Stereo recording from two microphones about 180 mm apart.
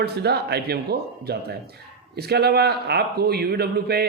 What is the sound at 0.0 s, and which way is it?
A man's voice, 65° right (ahead or behind).